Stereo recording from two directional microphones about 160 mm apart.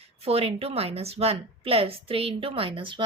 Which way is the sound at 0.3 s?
40° right (ahead or behind).